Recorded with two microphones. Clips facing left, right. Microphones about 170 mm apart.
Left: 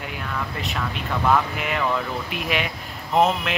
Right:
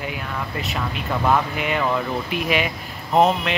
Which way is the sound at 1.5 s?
Centre (ahead or behind).